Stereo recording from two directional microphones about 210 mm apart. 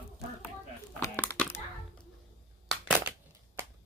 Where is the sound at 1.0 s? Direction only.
10° left (ahead or behind).